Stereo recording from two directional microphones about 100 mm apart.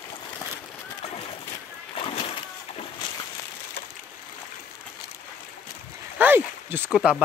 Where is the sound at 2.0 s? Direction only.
70° left (ahead or behind).